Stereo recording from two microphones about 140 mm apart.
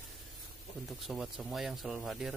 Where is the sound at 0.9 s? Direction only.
Centre (ahead or behind).